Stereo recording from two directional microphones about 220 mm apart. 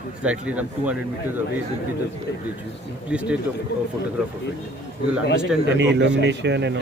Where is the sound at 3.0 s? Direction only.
5° right (ahead or behind).